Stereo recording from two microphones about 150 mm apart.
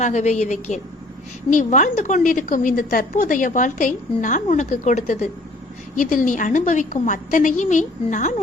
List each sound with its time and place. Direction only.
0.0 s a woman's voice: 50° left (ahead or behind)